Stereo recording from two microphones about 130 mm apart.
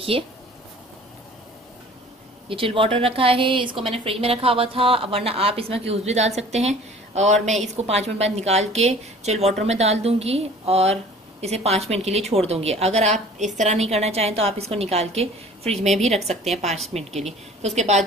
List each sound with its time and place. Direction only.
2.5 s a woman's voice: 45° right (ahead or behind); by 18.0 s 60° right (ahead or behind)